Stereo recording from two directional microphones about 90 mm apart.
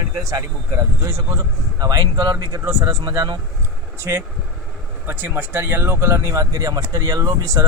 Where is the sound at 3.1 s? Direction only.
45° right (ahead or behind).